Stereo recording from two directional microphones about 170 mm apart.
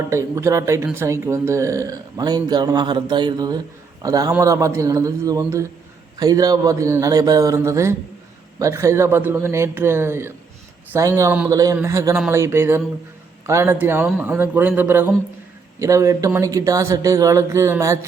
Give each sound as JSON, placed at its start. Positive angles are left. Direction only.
{"t": 0.1, "sound": "a man's voice", "side_deg": -15}